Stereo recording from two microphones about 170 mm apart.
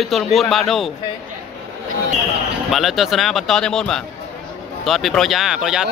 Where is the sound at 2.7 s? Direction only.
Centre (ahead or behind).